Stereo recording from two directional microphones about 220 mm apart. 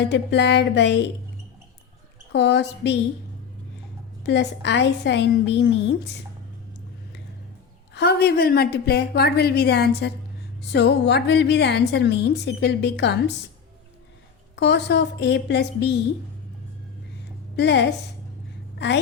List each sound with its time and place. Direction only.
0.0 s a woman's voice: 50° left (ahead or behind)
2.3 s a woman's voice: 50° left (ahead or behind)
4.2 s a woman's voice: 50° left (ahead or behind)
7.9 s a woman's voice: 45° left (ahead or behind)
14.5 s a woman's voice: 50° left (ahead or behind)
17.6 s a woman's voice: 50° left (ahead or behind)